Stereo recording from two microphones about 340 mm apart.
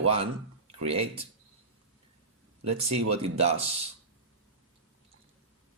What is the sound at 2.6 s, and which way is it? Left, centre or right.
Speech, centre.